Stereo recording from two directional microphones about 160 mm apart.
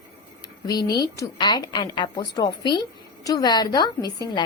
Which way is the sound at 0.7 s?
25° left (ahead or behind).